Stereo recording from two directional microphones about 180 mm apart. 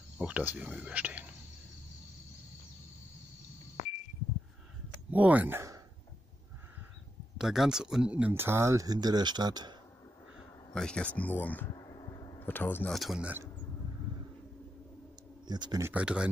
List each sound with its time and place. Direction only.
0.2 s speech: 10° right (ahead or behind)
5.1 s speech: 10° right (ahead or behind)
7.3 s speech: centre (ahead or behind); by 9.8 s 25° right (ahead or behind)
10.7 s speech: 5° left (ahead or behind)
11.7 s a sound: 25° left (ahead or behind)
12.4 s speech: 10° left (ahead or behind)
15.4 s speech: 20° right (ahead or behind)
15.9 s speech: 5° right (ahead or behind)